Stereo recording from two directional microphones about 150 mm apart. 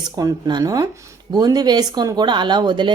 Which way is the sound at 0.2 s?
25° right (ahead or behind).